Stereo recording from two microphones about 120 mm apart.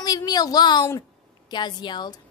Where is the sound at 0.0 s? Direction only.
35° left (ahead or behind).